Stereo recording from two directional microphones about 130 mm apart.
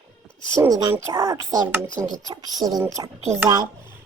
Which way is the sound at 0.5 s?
25° right (ahead or behind).